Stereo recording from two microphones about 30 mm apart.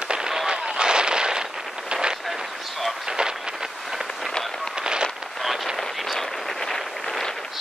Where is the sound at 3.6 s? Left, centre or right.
Centre.